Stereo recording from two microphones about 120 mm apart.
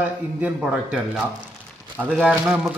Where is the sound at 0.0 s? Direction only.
10° right (ahead or behind).